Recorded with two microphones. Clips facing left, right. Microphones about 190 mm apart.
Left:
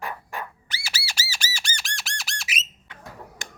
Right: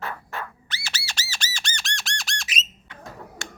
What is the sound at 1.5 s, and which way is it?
Squawk, 10° left (ahead or behind).